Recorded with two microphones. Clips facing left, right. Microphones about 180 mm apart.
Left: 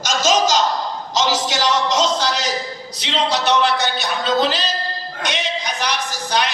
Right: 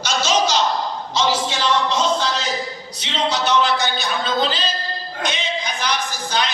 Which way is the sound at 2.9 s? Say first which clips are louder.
Left 2 dB; 70° left (ahead or behind).